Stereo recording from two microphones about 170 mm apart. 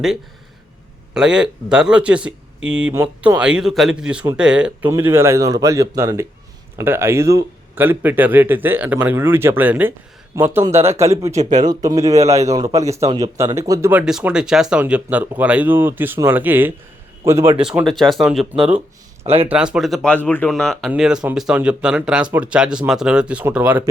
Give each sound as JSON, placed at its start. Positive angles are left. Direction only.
{"t": 1.1, "sound": "a man's voice", "side_deg": -5}
{"t": 14.0, "sound": "a man's voice", "side_deg": -5}
{"t": 17.6, "sound": "speech", "side_deg": -5}
{"t": 19.2, "sound": "a man's voice", "side_deg": -35}
{"t": 19.5, "sound": "speech", "side_deg": -5}